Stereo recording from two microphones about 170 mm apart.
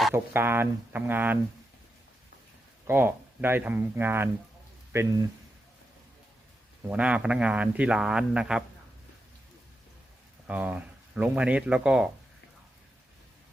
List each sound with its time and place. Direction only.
0.1 s a man's voice: 15° right (ahead or behind)
2.8 s a man's voice: 10° right (ahead or behind)
6.8 s a man's voice: 10° right (ahead or behind)
10.4 s speech: 10° right (ahead or behind)